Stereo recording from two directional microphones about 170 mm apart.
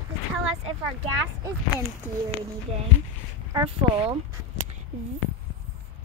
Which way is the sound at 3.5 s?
30° right (ahead or behind).